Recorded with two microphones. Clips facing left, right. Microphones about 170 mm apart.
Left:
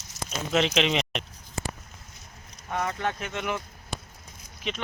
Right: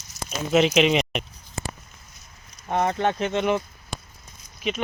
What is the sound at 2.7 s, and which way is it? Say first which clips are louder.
Speech: right 6 dB; 30° right (ahead or behind).